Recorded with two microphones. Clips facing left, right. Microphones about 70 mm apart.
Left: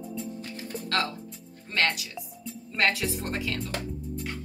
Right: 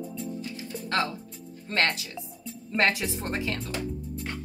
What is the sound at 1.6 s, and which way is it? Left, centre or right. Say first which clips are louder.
A woman's voice: right 1 dB; right.